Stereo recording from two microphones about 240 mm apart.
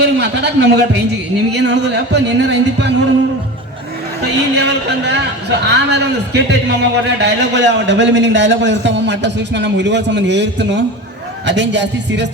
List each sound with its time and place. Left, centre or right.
0.0 s a man's voice: right
4.2 s a man's voice: right